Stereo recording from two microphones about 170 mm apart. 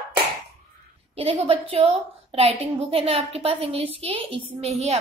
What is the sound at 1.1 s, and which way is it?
A woman's voice, 35° right (ahead or behind).